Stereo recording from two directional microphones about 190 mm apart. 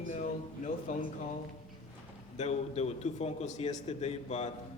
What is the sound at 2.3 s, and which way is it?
A man's voice, 35° left (ahead or behind).